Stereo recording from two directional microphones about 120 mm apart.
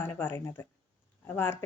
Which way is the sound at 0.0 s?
15° left (ahead or behind).